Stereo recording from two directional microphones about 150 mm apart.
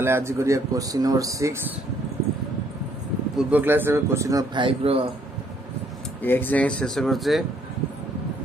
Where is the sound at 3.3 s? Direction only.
10° right (ahead or behind); by 5.0 s 35° right (ahead or behind).